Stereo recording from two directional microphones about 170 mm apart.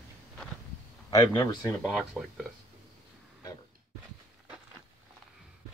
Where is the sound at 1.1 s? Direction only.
25° left (ahead or behind).